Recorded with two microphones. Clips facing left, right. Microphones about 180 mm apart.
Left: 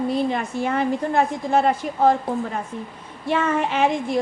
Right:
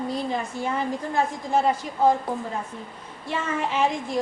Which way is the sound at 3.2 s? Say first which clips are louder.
Left 6 dB; 65° left (ahead or behind).